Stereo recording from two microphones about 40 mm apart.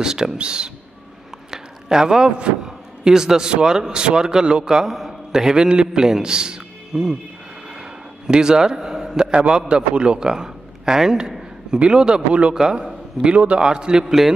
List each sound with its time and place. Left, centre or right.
0.0 s a man's voice: centre
1.5 s a man's voice: centre
4.8 s a man's voice: centre
8.3 s a man's voice: centre
9.3 s a man's voice: right; by 14.3 s centre